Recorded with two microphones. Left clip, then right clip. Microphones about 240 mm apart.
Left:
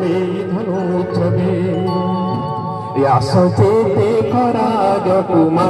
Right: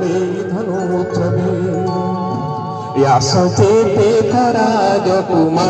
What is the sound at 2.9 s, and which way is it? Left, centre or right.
Music, right.